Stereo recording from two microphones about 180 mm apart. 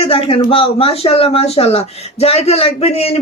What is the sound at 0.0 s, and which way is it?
Speech, 30° left (ahead or behind).